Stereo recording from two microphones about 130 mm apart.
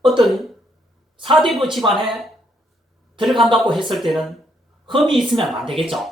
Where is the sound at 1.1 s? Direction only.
40° right (ahead or behind).